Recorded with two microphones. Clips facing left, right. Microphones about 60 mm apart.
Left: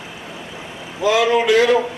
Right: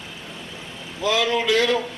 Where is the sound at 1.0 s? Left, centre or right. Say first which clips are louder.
Left 6 dB; centre.